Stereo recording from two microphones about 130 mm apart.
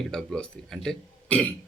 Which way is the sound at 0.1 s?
5° left (ahead or behind).